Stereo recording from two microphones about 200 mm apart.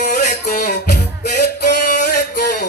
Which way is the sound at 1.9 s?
40° left (ahead or behind).